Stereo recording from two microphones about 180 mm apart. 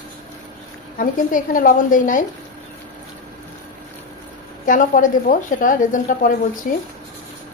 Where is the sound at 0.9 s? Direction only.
50° left (ahead or behind).